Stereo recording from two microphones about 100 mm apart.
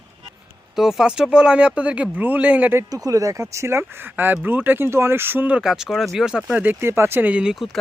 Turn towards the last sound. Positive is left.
turn(degrees=0)  # may be behind; listen again after turning